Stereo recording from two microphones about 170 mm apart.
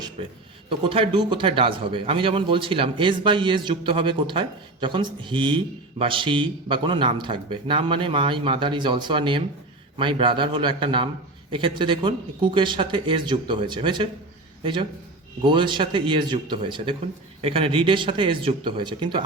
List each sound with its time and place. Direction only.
0.2 s a man's voice: 30° right (ahead or behind)